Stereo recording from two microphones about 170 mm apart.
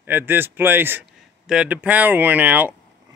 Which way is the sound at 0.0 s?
10° right (ahead or behind).